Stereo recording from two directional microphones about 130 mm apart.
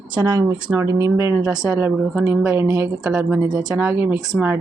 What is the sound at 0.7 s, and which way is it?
Speech, 20° right (ahead or behind).